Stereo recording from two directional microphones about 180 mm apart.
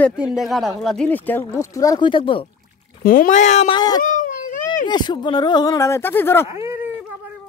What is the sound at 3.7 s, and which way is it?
Speech, 20° left (ahead or behind).